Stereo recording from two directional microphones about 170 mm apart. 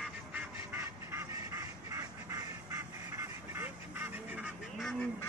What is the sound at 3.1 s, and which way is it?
Duck, 15° right (ahead or behind).